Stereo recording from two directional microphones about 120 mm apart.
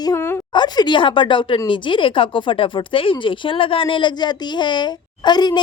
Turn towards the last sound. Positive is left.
turn(degrees=35)  # may be behind; listen again after turning